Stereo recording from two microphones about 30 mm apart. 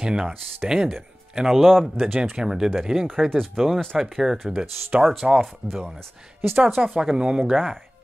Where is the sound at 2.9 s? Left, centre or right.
Centre.